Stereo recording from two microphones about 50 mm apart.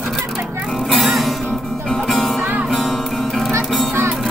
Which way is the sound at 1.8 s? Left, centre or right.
Centre.